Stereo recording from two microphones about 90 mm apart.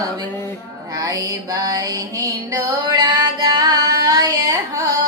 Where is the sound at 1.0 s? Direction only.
40° right (ahead or behind).